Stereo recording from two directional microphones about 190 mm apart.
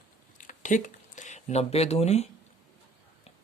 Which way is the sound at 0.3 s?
45° left (ahead or behind).